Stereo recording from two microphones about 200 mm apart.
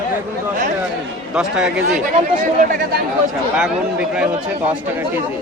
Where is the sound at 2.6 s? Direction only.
40° right (ahead or behind).